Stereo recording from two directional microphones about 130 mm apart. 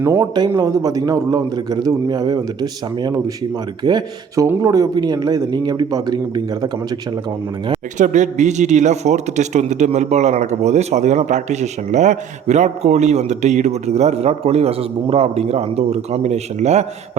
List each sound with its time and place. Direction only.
0.0 s a man's voice: 20° right (ahead or behind)
0.3 s a man's voice: 30° right (ahead or behind)
7.9 s a man's voice: 70° right (ahead or behind)